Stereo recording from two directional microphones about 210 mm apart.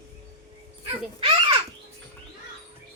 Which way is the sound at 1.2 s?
25° right (ahead or behind).